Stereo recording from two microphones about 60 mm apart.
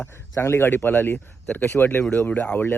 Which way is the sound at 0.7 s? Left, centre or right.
Left.